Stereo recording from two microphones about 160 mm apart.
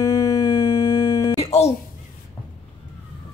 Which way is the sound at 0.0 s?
25° left (ahead or behind).